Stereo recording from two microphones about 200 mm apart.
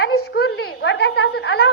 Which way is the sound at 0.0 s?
55° left (ahead or behind).